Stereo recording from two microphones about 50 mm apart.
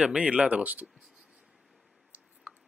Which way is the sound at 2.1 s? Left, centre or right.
Right.